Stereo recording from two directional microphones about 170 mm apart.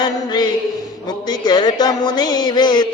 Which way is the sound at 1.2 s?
25° left (ahead or behind).